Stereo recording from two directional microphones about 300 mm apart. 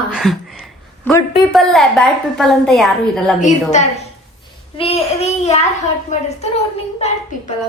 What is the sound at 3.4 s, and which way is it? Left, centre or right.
Child singing, left.